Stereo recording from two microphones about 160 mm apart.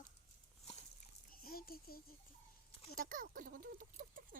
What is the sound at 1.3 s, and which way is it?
Speech, 70° left (ahead or behind).